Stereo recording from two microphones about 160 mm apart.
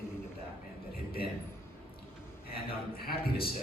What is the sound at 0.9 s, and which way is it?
Speech, 70° left (ahead or behind).